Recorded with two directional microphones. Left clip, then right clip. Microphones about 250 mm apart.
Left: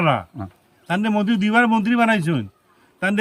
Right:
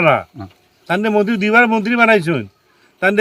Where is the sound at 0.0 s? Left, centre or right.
Centre.